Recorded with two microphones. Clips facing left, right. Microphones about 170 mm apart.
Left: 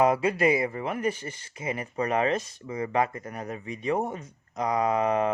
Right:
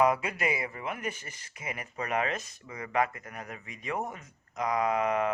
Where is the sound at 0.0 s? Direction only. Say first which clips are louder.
Left 5 dB; 30° left (ahead or behind).